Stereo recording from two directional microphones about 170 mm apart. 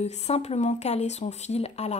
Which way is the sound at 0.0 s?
40° left (ahead or behind).